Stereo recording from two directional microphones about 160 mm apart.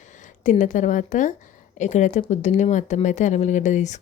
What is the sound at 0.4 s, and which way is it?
Speech, 50° left (ahead or behind).